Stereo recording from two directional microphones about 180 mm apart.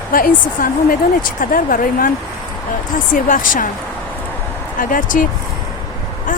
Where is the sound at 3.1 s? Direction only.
50° left (ahead or behind).